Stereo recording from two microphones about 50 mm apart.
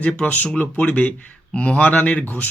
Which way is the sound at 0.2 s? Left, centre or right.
Left.